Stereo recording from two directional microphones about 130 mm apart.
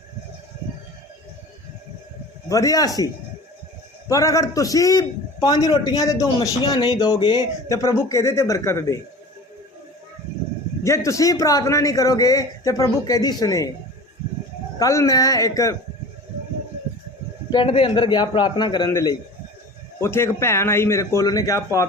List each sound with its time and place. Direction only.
2.5 s a man's voice: 25° left (ahead or behind)
4.1 s a man's voice: 25° left (ahead or behind)
10.8 s a man's voice: 25° left (ahead or behind)
14.8 s a man's voice: 25° left (ahead or behind)
17.5 s a man's voice: 40° left (ahead or behind)
18.9 s a man's voice: 25° left (ahead or behind)